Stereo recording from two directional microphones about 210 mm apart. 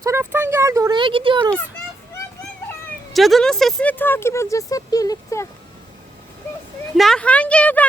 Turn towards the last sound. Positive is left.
turn(degrees=5)  # may be behind; listen again after turning